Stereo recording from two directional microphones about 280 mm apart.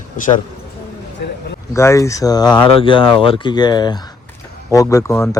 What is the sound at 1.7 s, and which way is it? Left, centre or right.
Speech, centre.